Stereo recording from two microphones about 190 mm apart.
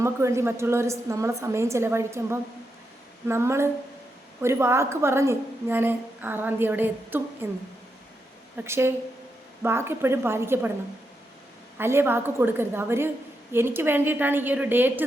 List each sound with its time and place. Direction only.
0.0 s a woman's voice: 15° right (ahead or behind)
8.5 s a woman's voice: 15° right (ahead or behind)
11.8 s a woman's voice: 10° right (ahead or behind)